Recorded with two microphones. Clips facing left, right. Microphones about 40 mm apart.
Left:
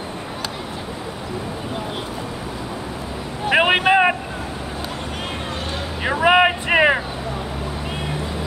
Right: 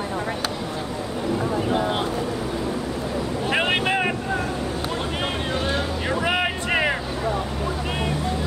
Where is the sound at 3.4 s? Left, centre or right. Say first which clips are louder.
Left 7 dB; left.